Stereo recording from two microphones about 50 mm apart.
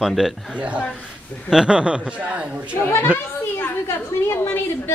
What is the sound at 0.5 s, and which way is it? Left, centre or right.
A man's voice, right.